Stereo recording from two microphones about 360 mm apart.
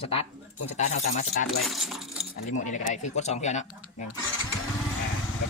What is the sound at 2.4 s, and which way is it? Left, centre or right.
Speech, centre.